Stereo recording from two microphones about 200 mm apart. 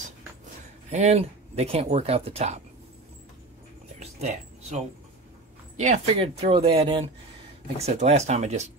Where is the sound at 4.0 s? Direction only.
35° right (ahead or behind).